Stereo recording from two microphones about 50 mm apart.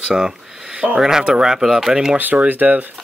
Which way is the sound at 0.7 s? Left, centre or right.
Right.